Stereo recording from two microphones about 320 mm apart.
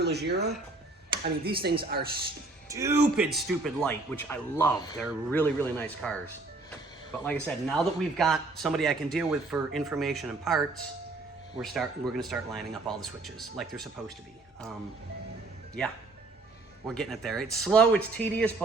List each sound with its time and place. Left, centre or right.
0.0 s speech: right
2.6 s speech: centre
11.6 s speech: centre
16.8 s speech: centre